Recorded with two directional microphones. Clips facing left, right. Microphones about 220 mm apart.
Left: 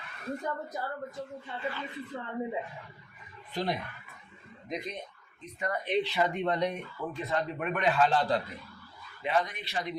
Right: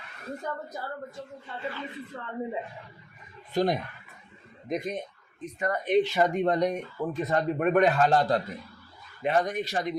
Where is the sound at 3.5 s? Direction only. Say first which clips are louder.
Right 7 dB; 45° right (ahead or behind).